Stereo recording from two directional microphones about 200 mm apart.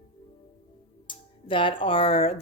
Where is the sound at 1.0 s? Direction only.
25° left (ahead or behind).